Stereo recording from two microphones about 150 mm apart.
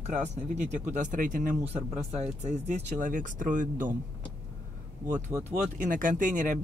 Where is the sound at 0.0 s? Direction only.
50° right (ahead or behind).